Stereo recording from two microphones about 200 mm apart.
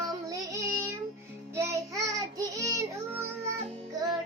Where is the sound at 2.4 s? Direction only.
15° right (ahead or behind).